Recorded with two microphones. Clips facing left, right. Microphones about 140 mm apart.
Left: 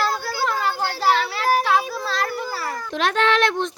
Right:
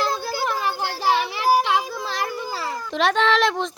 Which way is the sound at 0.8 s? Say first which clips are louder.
Left 2 dB; 15° right (ahead or behind).